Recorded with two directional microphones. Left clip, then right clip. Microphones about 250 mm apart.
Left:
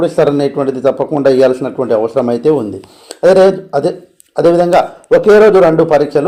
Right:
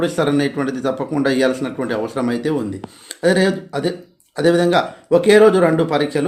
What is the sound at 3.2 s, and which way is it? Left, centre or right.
Speech, centre.